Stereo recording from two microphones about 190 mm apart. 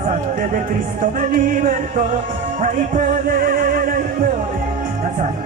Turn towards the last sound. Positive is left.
turn(degrees=-45)  # may be behind; listen again after turning